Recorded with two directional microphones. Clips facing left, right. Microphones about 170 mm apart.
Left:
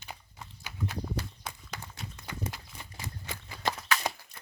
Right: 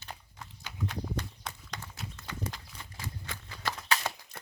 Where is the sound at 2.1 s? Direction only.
10° left (ahead or behind).